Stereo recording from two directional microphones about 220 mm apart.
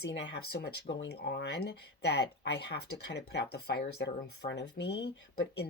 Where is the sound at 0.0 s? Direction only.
55° left (ahead or behind).